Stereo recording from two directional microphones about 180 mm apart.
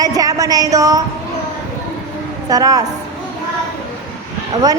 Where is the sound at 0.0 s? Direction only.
20° right (ahead or behind).